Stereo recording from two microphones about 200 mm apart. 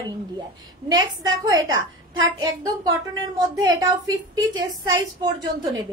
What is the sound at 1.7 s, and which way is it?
Speech, 80° right.